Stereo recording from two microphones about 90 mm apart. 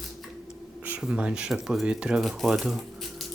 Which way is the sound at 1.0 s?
10° right (ahead or behind).